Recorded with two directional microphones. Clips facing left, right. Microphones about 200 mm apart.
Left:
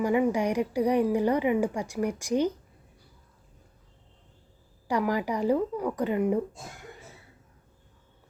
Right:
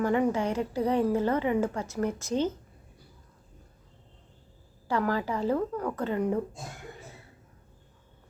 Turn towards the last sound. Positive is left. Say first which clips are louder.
# left 2 dB
turn(degrees=15)  # may be behind; listen again after turning